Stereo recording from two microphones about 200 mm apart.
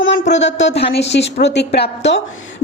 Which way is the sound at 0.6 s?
60° left (ahead or behind).